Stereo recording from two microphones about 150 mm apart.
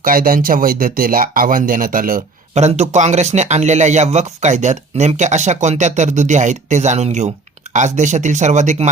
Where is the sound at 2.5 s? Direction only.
50° right (ahead or behind).